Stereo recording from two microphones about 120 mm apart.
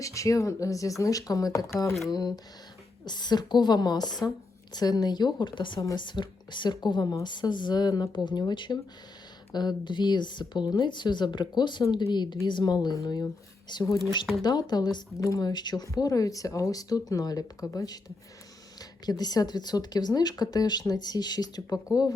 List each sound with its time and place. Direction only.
0.0 s speech: 25° left (ahead or behind)